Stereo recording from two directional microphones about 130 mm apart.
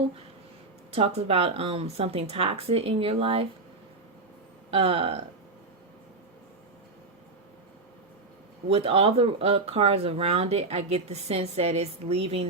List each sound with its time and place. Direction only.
0.9 s speech: 50° right (ahead or behind)
4.7 s speech: 50° right (ahead or behind)
8.7 s speech: 45° right (ahead or behind)